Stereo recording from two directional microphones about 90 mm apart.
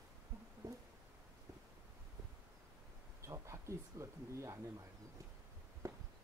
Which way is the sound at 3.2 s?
35° right (ahead or behind).